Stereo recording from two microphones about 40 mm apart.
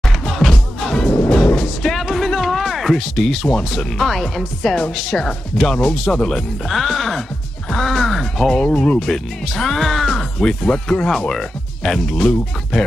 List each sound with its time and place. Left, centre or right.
0.4 s music: centre
0.9 s music: centre
1.8 s speech: centre
6.7 s speech: centre
8.5 s speech: left
9.0 s speech: centre